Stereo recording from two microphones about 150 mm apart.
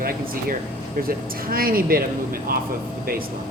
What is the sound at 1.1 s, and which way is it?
Speech, 75° right (ahead or behind).